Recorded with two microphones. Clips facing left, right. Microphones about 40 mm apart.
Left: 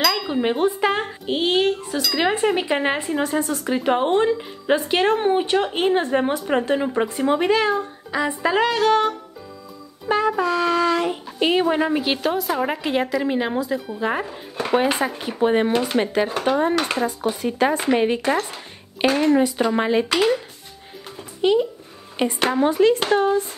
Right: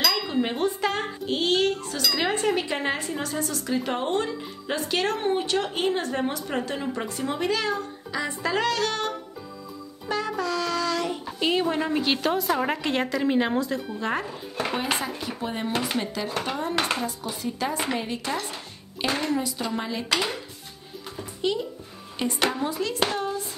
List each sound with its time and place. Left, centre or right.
0.0 s a child's voice: centre
10.0 s a sound: left
15.0 s speech: left
20.1 s a child's voice: left
22.2 s speech: left